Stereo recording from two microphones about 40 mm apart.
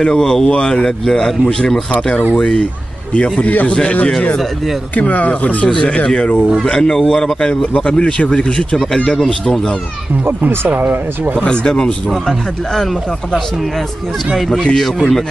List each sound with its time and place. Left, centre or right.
0.0 s a man's voice: centre
2.3 s speech: left
3.2 s a man's voice: left
3.7 s speech: left
4.9 s a man's voice: left
5.7 s a man's voice: centre
7.7 s a man's voice: left
8.5 s speech: centre
9.1 s a man's voice: centre
10.2 s speech: right
11.4 s speech: left
14.3 s a man's voice: centre